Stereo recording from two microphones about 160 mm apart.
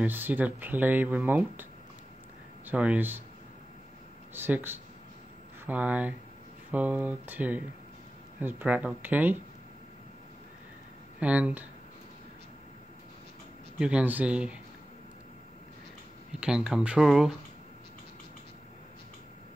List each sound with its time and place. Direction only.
0.0 s speech: 10° right (ahead or behind)
4.3 s speech: 15° right (ahead or behind)
11.1 s speech: 10° right (ahead or behind)
13.7 s speech: 5° right (ahead or behind)
16.3 s speech: 5° right (ahead or behind)